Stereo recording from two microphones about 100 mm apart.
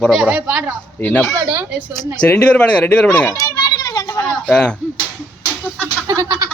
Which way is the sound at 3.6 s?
40° left (ahead or behind).